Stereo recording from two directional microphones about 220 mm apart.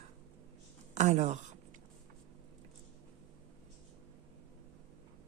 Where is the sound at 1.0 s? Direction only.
30° right (ahead or behind).